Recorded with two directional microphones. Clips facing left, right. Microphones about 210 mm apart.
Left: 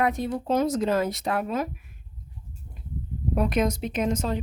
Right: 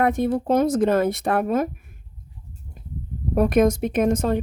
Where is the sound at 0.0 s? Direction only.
50° right (ahead or behind).